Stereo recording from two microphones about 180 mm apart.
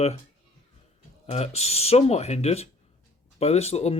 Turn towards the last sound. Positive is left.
turn(degrees=35)  # may be behind; listen again after turning